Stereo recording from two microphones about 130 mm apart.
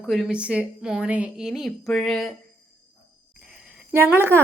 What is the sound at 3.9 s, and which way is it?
Speech, 20° right (ahead or behind).